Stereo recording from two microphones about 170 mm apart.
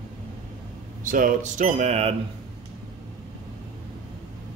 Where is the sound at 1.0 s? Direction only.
50° right (ahead or behind).